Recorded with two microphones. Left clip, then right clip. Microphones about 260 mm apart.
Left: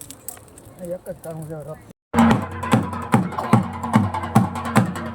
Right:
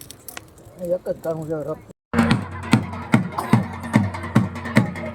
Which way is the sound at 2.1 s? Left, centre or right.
Centre.